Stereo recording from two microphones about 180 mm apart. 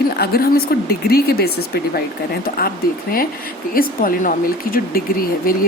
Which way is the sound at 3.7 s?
50° left (ahead or behind).